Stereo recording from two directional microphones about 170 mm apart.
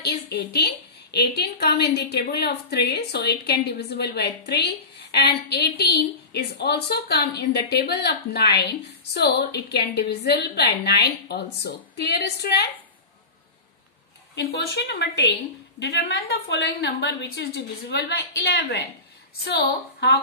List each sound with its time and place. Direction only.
0.0 s a woman's voice: 80° left
14.3 s a woman's voice: 80° left